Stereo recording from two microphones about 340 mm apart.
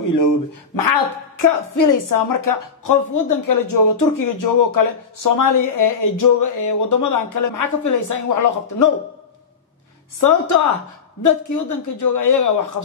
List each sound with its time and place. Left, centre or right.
0.7 s a woman's voice: left
10.2 s speech: left